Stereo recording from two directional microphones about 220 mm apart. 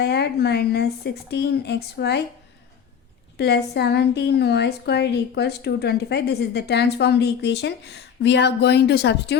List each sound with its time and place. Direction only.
0.0 s a woman's voice: 50° left (ahead or behind)
3.3 s a woman's voice: 50° left (ahead or behind)